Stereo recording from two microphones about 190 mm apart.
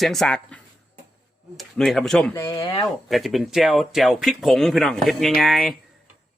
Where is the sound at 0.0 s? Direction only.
Centre (ahead or behind).